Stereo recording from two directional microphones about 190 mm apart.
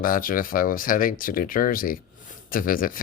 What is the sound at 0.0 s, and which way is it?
Speech, 45° left (ahead or behind).